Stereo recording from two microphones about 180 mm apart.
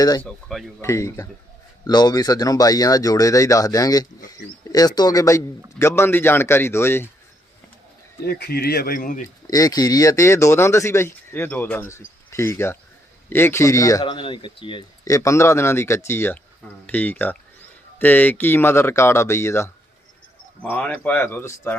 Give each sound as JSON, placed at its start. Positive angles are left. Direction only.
{"t": 0.2, "sound": "speech", "side_deg": 5}
{"t": 0.8, "sound": "speech", "side_deg": 15}
{"t": 8.2, "sound": "speech", "side_deg": 65}
{"t": 9.5, "sound": "speech", "side_deg": 20}